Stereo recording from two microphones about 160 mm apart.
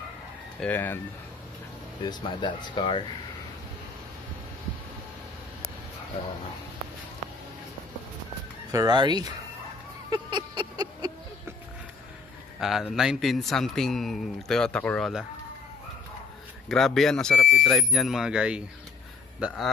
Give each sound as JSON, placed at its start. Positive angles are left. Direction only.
{"t": 0.6, "sound": "speech", "side_deg": 10}
{"t": 2.0, "sound": "speech", "side_deg": 30}
{"t": 8.7, "sound": "speech", "side_deg": -25}
{"t": 10.0, "sound": "a sound", "side_deg": -25}
{"t": 12.5, "sound": "a man's voice", "side_deg": 0}
{"t": 16.6, "sound": "a man's voice", "side_deg": 0}